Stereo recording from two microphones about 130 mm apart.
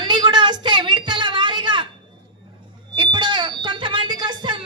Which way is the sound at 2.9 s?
35° right (ahead or behind).